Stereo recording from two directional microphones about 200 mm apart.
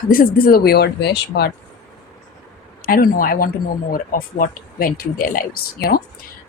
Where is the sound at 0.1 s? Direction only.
45° left (ahead or behind).